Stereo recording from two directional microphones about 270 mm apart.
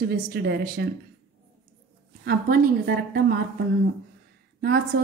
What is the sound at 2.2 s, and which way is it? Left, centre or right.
Speech, right.